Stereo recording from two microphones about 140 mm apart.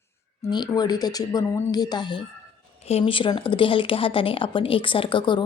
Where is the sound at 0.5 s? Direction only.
30° left (ahead or behind).